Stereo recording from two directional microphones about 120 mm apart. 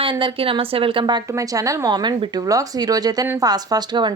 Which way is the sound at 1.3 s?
25° right (ahead or behind).